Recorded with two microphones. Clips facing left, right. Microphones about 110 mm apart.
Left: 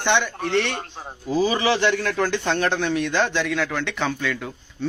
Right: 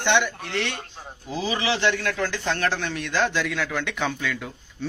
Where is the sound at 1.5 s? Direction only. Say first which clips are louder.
Even; 45° left (ahead or behind).